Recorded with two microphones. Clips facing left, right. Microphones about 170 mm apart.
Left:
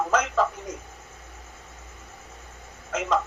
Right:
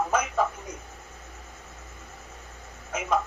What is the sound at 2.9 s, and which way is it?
Speech, 80° left.